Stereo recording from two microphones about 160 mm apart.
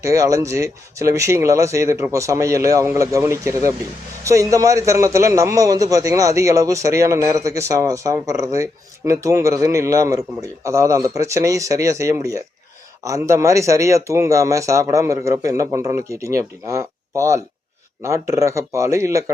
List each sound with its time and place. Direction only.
0.0 s a man's voice: 20° right (ahead or behind)